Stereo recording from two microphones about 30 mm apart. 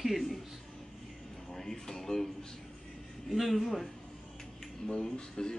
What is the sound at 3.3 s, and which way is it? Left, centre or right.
Speech, centre.